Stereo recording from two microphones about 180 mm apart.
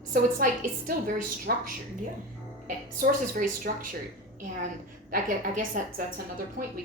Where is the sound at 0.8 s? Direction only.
55° right (ahead or behind).